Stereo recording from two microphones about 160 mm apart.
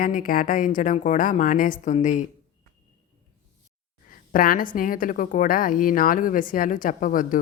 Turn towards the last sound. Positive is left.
turn(degrees=55)  # may be behind; listen again after turning